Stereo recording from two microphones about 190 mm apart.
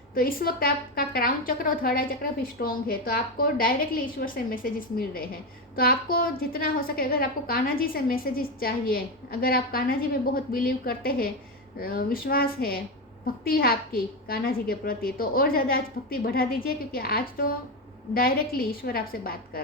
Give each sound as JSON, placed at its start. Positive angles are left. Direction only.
{"t": 0.1, "sound": "a woman's voice", "side_deg": 50}